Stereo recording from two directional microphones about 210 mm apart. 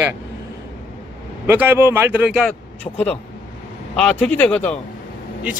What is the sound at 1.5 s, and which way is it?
Speech, 10° right (ahead or behind).